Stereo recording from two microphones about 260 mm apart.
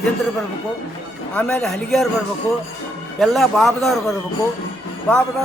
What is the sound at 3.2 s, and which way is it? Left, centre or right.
Speech, centre.